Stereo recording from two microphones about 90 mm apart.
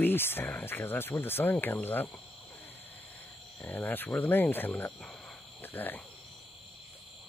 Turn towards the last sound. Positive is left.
turn(degrees=20)  # may be behind; listen again after turning